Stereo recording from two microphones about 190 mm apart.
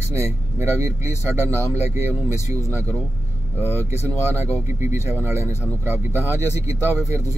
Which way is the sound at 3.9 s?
15° left (ahead or behind).